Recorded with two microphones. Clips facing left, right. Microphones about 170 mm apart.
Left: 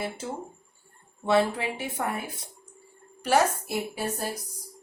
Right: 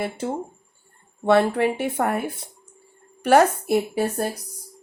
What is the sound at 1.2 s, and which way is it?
A woman's voice, 60° right (ahead or behind).